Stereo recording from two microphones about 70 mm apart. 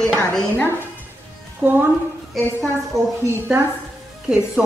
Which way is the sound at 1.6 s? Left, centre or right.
Right.